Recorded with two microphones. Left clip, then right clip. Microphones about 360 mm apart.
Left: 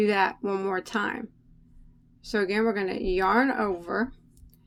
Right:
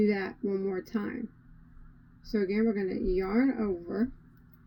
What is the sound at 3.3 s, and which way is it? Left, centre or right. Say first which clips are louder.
Speech: left 6 dB; left.